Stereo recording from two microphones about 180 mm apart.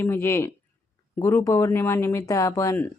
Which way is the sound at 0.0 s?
15° left (ahead or behind).